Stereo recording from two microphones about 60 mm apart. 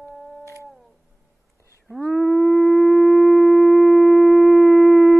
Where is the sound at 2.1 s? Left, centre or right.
Centre.